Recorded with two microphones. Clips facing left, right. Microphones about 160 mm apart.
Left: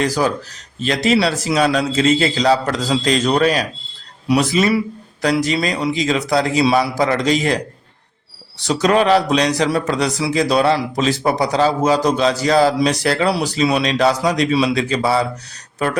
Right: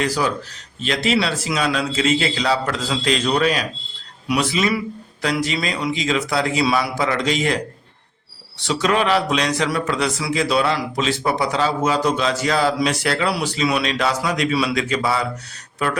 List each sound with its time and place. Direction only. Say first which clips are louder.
0.0 s a man's voice: left 3 dB; 40° left (ahead or behind)
8.6 s a man's voice: left 4 dB; 40° left (ahead or behind)